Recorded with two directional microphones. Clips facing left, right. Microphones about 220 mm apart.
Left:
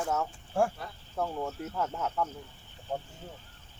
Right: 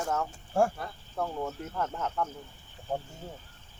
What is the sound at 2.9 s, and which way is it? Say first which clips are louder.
Speech: right 2 dB; 50° right (ahead or behind).